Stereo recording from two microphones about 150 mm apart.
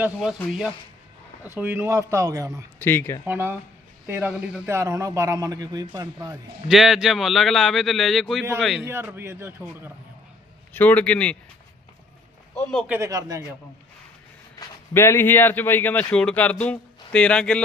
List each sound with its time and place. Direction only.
0.0 s speech: 5° right (ahead or behind)
1.5 s a man's voice: 10° right (ahead or behind)
2.7 s speech: 15° left (ahead or behind)
3.2 s a man's voice: 15° right (ahead or behind)
4.7 s a man's voice: 20° right (ahead or behind)
6.7 s speech: centre (ahead or behind)
8.8 s a man's voice: 15° right (ahead or behind)
10.8 s speech: 10° left (ahead or behind)
12.9 s a man's voice: 20° right (ahead or behind)
14.9 s speech: 15° left (ahead or behind)